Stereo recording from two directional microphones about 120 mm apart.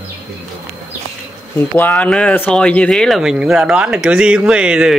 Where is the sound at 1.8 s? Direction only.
15° left (ahead or behind).